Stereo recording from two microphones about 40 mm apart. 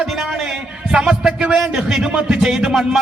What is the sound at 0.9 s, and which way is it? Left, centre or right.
A man's voice, centre.